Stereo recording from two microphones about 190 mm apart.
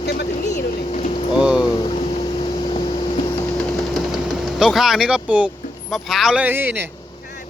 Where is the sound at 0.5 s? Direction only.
40° left (ahead or behind).